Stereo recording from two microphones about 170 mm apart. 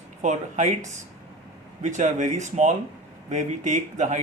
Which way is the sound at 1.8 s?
45° right (ahead or behind).